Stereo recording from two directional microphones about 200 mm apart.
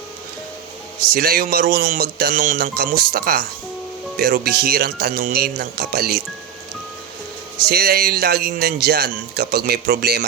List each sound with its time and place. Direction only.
1.0 s speech: 50° right (ahead or behind)
7.6 s speech: 50° right (ahead or behind)